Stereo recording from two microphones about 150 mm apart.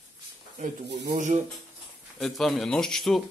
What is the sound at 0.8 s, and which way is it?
Speech, 90° right.